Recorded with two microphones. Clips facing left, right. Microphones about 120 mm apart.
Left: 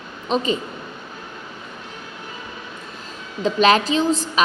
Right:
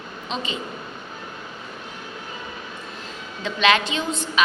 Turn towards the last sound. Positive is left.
turn(degrees=35)  # may be behind; listen again after turning